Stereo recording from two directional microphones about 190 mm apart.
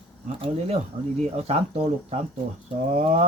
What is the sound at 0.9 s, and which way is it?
Speech, 25° right (ahead or behind).